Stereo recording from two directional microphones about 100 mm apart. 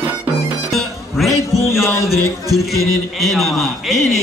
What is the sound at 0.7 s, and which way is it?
Music, centre (ahead or behind).